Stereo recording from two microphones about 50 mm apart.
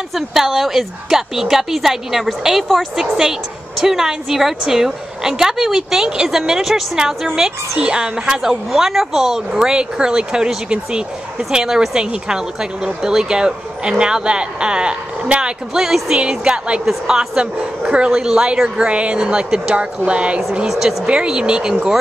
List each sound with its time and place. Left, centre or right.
0.1 s a woman's voice: centre; by 20.4 s right
20.6 s a woman's voice: centre